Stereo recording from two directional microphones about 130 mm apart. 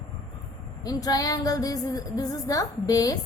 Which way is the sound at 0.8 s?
30° left (ahead or behind).